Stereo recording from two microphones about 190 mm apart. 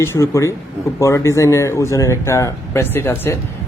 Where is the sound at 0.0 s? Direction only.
15° left (ahead or behind).